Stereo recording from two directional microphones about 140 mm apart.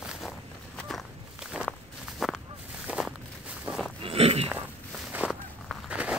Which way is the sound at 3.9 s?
45° right (ahead or behind).